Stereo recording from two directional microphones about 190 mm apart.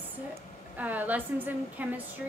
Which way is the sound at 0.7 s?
10° right (ahead or behind).